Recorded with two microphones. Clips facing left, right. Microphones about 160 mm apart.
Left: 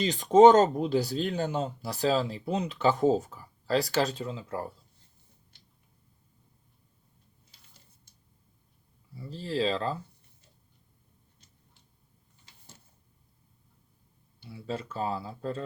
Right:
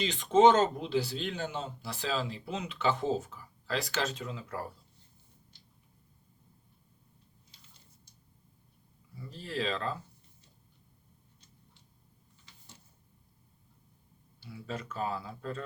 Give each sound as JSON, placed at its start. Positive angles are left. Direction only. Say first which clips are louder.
{"t": 0.0, "sound": "speech", "louder": "left 5 dB", "side_deg": 40}
{"t": 9.1, "sound": "speech", "louder": "left 6 dB", "side_deg": 30}
{"t": 14.5, "sound": "speech", "louder": "left 4 dB", "side_deg": 30}